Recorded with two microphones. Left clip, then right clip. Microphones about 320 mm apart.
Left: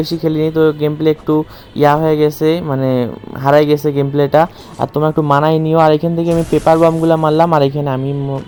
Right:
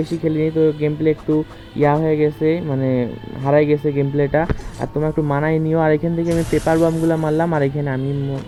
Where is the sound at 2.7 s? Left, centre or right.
Centre.